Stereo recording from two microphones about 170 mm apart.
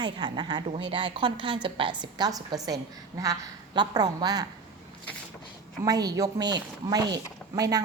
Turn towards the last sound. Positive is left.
turn(degrees=-20)  # may be behind; listen again after turning